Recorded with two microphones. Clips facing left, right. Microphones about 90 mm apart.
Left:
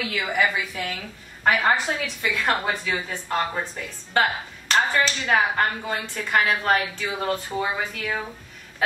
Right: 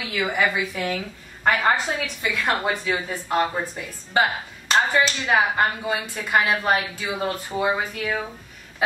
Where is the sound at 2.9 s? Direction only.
15° right (ahead or behind).